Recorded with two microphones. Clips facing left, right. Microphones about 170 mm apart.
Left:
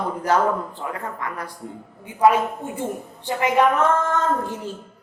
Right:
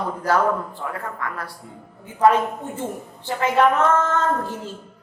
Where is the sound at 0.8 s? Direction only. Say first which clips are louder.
Even; 20° left (ahead or behind).